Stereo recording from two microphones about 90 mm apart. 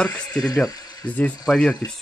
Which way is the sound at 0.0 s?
10° left (ahead or behind).